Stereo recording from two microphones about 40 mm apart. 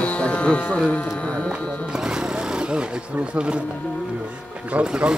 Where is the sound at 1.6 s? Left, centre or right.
Left.